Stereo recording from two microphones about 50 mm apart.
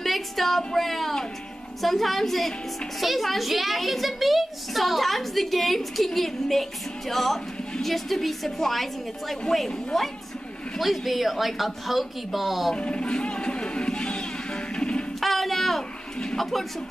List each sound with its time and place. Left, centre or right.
0.0 s a sound: centre
0.7 s a child's voice: centre
10.8 s a child's voice: centre
12.7 s music: left
15.1 s music: centre
16.3 s speech: centre